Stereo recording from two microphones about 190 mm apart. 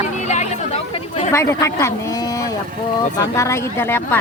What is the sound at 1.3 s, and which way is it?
Speech, 15° left (ahead or behind).